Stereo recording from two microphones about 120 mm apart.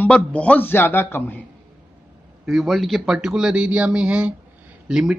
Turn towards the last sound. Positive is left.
turn(degrees=-5)  # may be behind; listen again after turning